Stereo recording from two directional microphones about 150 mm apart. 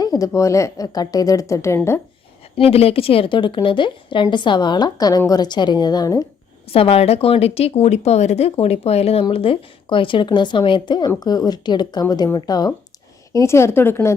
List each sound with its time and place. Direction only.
0.0 s a woman's voice: 25° left (ahead or behind)
2.6 s speech: 40° left (ahead or behind); by 6.2 s 25° left (ahead or behind)
6.7 s a woman's voice: 40° left (ahead or behind); by 14.1 s 15° left (ahead or behind)